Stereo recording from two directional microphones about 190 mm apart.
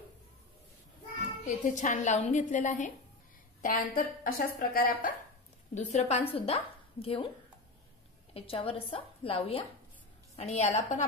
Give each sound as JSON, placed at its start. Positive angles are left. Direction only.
{"t": 1.4, "sound": "a woman's voice", "side_deg": 40}
{"t": 5.8, "sound": "a woman's voice", "side_deg": 35}
{"t": 8.3, "sound": "a woman's voice", "side_deg": 30}